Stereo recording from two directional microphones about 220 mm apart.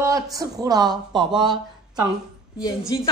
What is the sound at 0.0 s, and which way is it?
Speech, 15° right (ahead or behind).